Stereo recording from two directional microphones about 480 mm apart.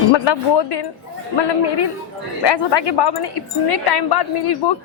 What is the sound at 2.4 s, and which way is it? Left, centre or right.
A woman's voice, left.